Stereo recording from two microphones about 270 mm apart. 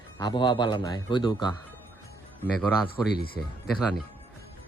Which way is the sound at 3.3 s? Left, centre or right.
Centre.